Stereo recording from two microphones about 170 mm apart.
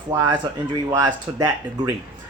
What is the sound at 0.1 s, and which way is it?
Speech, 20° right (ahead or behind).